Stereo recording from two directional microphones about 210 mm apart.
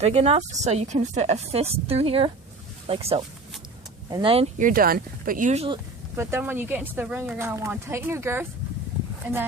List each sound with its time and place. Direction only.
0.0 s a woman's voice: 30° right (ahead or behind)
4.6 s speech: 40° right (ahead or behind)
6.1 s speech: 10° right (ahead or behind)